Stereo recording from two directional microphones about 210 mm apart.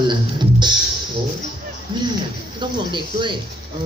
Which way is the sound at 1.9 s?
20° right (ahead or behind).